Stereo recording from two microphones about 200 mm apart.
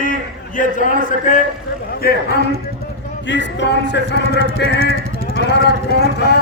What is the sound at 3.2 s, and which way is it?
Speech, 60° left (ahead or behind).